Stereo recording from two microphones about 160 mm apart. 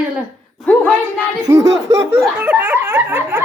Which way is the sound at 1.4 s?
20° right (ahead or behind).